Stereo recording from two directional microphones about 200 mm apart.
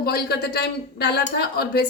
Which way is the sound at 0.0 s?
50° left (ahead or behind).